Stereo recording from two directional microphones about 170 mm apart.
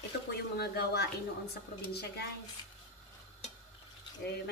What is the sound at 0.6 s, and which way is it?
Speech, 70° left (ahead or behind).